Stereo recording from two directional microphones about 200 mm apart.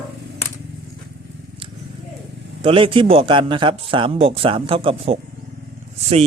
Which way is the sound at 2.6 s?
25° right (ahead or behind).